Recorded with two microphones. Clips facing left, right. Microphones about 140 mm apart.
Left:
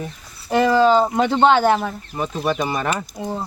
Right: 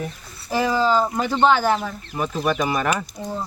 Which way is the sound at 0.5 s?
65° left (ahead or behind).